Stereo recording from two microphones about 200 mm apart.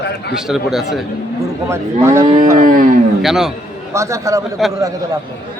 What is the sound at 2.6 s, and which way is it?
Speech, 40° right (ahead or behind).